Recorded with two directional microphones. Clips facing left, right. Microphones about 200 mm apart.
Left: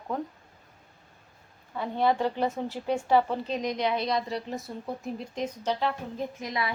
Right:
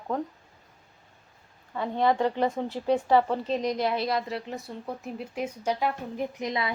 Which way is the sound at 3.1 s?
Centre (ahead or behind).